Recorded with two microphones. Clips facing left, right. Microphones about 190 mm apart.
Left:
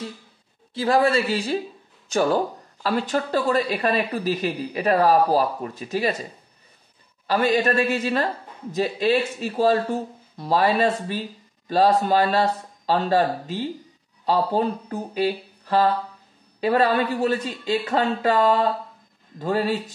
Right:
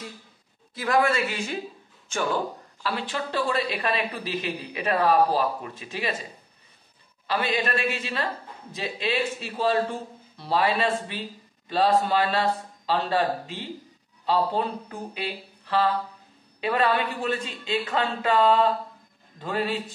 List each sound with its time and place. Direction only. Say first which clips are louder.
0.7 s speech: left 4 dB; 30° left (ahead or behind)
7.2 s speech: left 6 dB; 40° left (ahead or behind)
9.4 s speech: left 4 dB; 40° left (ahead or behind)